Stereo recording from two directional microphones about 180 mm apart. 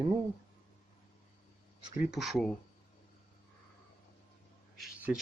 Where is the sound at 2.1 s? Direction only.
Centre (ahead or behind).